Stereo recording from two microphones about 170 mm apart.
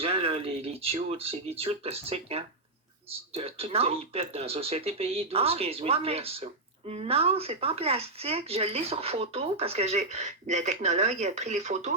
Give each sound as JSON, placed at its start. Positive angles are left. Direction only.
{"t": 0.0, "sound": "speech", "side_deg": -35}